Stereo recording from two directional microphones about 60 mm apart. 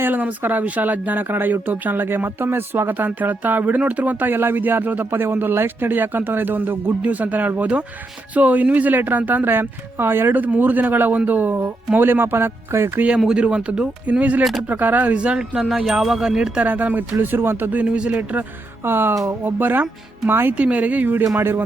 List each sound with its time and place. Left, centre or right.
0.0 s speech: right
13.1 s speech: centre
15.5 s speech: centre
16.6 s speech: right
17.8 s speech: centre
18.8 s speech: right
20.6 s speech: right